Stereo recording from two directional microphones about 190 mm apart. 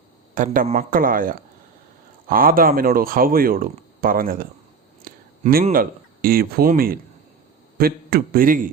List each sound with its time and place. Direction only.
0.3 s speech: 45° right (ahead or behind)
5.0 s a sound: 50° right (ahead or behind)
5.7 s speech: 50° right (ahead or behind)